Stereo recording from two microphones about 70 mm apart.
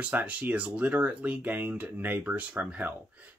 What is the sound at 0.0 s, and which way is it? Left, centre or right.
Speech, centre.